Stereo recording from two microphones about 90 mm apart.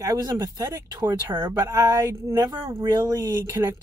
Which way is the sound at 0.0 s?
40° right (ahead or behind).